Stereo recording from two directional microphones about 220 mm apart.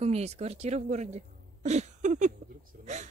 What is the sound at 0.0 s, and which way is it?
Speech, 30° right (ahead or behind).